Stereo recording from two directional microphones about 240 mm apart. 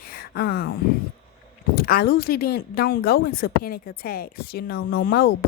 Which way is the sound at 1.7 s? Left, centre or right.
Left.